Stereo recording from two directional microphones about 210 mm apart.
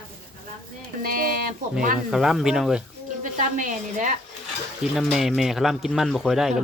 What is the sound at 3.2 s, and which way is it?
Speech, 35° right (ahead or behind).